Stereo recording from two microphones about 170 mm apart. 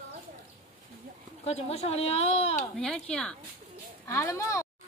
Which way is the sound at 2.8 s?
5° left (ahead or behind).